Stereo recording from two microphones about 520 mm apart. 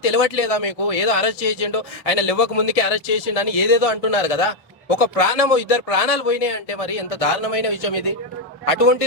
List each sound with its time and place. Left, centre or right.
0.0 s speech: left